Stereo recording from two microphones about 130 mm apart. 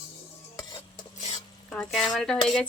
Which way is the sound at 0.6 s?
30° left (ahead or behind).